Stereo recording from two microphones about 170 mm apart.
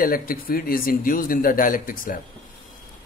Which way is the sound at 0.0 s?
60° left (ahead or behind).